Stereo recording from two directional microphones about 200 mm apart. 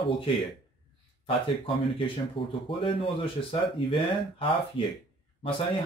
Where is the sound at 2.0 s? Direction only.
25° left (ahead or behind).